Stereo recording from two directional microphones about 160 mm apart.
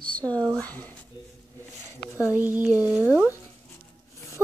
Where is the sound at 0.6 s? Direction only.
25° right (ahead or behind).